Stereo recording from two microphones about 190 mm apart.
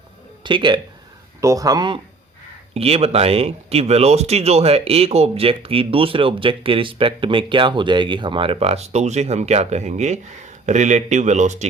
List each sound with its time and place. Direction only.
0.4 s speech: 25° right (ahead or behind)
2.7 s speech: 30° right (ahead or behind)